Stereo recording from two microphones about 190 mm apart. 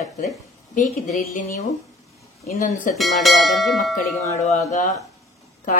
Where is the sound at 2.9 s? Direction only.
Centre (ahead or behind).